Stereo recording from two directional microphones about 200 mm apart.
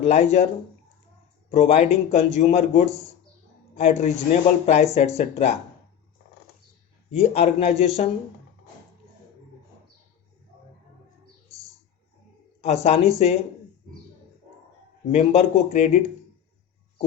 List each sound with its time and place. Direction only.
0.0 s a man's voice: 35° left (ahead or behind)
1.5 s a man's voice: 35° left (ahead or behind)
7.1 s a man's voice: 30° left (ahead or behind)
12.6 s a man's voice: 30° left (ahead or behind)
15.1 s a man's voice: 35° left (ahead or behind)